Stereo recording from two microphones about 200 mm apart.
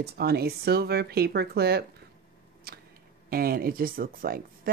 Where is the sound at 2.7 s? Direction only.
50° right (ahead or behind).